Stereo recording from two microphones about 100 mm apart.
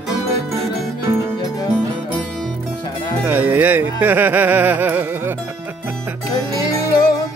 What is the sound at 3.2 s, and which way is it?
Music, 20° right (ahead or behind).